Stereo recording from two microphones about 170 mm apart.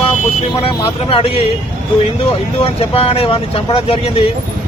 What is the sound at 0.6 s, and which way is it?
Speech, 35° left (ahead or behind).